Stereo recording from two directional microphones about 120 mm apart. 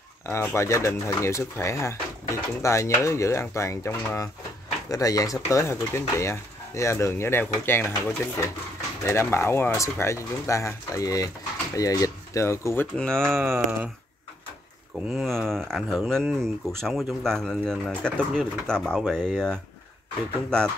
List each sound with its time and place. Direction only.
0.3 s speech: 20° left (ahead or behind)
12.9 s speech: 5° left (ahead or behind)
13.3 s a sound: 20° right (ahead or behind)
15.2 s speech: 5° left (ahead or behind)